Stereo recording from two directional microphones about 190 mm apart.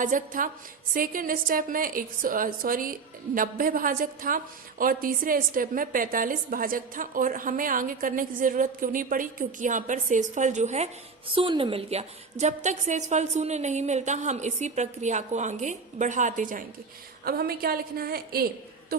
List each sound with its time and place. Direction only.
0.0 s a woman's voice: 45° right (ahead or behind)
11.3 s a woman's voice: 25° right (ahead or behind); by 18.4 s 55° right (ahead or behind)